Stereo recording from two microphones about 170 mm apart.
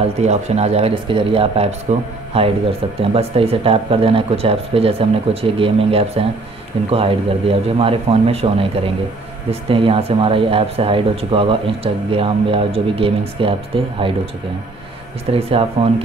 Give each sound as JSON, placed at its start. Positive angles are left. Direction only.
{"t": 0.3, "sound": "speech", "side_deg": -40}
{"t": 15.3, "sound": "speech", "side_deg": -35}